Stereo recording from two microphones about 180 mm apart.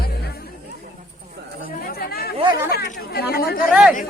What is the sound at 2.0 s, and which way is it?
Chatter, 60° left (ahead or behind).